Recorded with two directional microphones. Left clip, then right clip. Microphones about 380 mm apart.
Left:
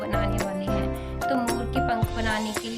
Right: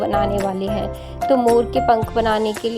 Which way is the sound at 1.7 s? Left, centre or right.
Centre.